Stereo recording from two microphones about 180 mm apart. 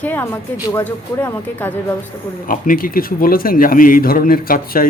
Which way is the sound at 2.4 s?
50° left (ahead or behind).